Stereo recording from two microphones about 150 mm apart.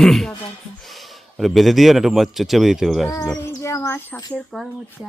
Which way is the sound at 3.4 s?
20° left (ahead or behind).